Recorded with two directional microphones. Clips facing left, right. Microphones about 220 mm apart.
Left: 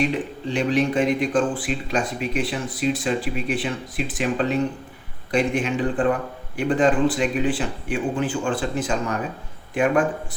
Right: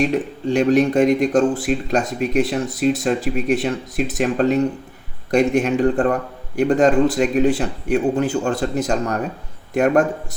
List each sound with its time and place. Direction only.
0.5 s speech: 45° right (ahead or behind)